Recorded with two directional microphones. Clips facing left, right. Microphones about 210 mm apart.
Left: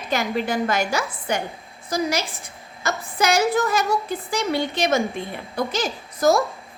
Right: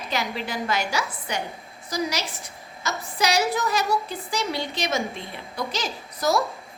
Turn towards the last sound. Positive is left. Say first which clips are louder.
# left 5 dB
turn(degrees=50)  # may be behind; listen again after turning